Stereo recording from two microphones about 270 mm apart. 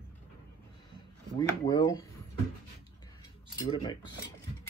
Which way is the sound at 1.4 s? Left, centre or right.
Centre.